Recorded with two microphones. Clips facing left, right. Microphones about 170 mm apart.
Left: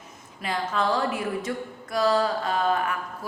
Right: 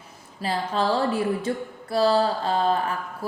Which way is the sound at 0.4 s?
30° right (ahead or behind).